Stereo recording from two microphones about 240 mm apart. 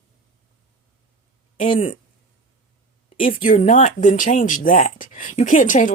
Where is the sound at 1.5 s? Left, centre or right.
Left.